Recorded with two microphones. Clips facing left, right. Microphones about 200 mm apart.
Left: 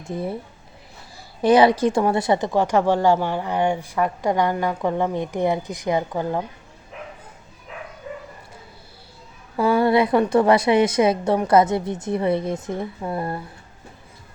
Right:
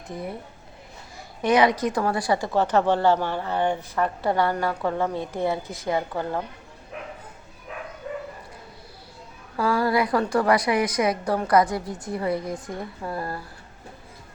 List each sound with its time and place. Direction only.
0.0 s a woman's voice: 30° left (ahead or behind)
1.4 s a woman's voice: 30° left (ahead or behind); by 6.4 s 15° left (ahead or behind)
9.6 s a woman's voice: 25° left (ahead or behind)